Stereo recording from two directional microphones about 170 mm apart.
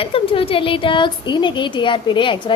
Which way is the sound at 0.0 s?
35° left (ahead or behind).